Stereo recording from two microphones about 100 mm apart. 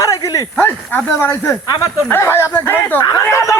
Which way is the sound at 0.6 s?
15° left (ahead or behind).